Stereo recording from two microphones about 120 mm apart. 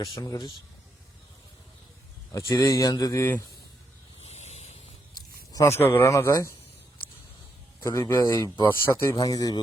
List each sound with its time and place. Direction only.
0.2 s speech: 30° left (ahead or behind)
2.5 s speech: 25° left (ahead or behind)
4.2 s a sound: 65° left (ahead or behind)
5.5 s speech: 25° left (ahead or behind)
7.9 s speech: 25° left (ahead or behind)
8.6 s speech: 20° left (ahead or behind)
9.2 s speech: 30° left (ahead or behind)